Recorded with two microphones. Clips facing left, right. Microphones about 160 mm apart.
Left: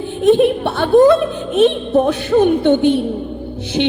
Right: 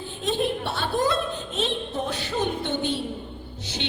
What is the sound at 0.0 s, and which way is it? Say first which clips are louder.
A woman's voice: left 14 dB; 60° left (ahead or behind).